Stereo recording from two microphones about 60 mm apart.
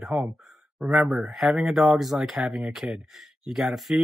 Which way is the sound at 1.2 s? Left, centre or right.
Centre.